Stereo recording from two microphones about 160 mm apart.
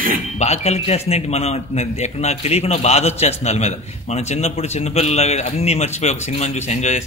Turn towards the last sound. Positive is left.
turn(degrees=45)  # may be behind; listen again after turning